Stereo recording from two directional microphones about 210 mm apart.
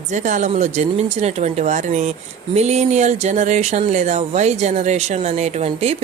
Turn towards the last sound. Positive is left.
turn(degrees=-30)  # may be behind; listen again after turning